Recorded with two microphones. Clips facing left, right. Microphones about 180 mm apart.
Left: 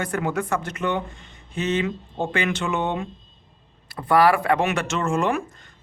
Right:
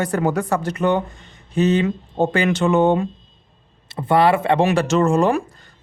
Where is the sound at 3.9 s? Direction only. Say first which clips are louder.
Right 2 dB; 25° right (ahead or behind).